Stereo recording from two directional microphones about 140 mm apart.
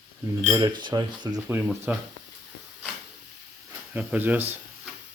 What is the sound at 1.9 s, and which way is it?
Speech, 10° right (ahead or behind).